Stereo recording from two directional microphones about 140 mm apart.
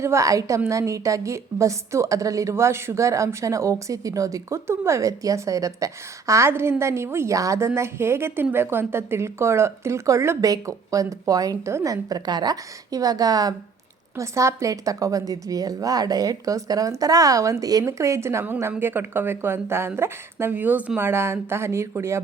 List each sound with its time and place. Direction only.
0.0 s a woman's voice: 20° right (ahead or behind)